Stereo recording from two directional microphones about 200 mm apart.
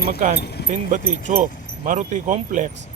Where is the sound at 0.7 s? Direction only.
40° right (ahead or behind).